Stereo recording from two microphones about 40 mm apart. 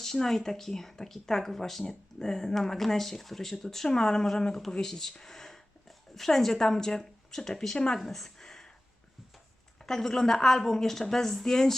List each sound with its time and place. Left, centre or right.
0.0 s speech: centre
7.9 s a sound: centre
9.8 s speech: centre